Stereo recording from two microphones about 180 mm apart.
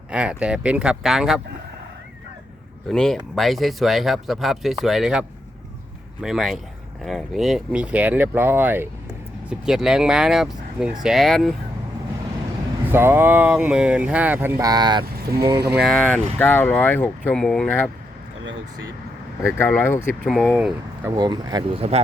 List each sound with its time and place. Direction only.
0.1 s speech: 5° right (ahead or behind)
2.9 s speech: 5° left (ahead or behind)
6.2 s speech: centre (ahead or behind)
12.9 s speech: 10° right (ahead or behind)
15.0 s speech: 60° right (ahead or behind)
15.8 s speech: 5° left (ahead or behind)
19.4 s speech: 15° left (ahead or behind)
20.2 s speech: centre (ahead or behind)
21.1 s speech: 20° right (ahead or behind)